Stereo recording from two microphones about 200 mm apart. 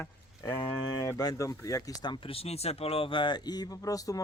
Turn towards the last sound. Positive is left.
turn(degrees=15)  # may be behind; listen again after turning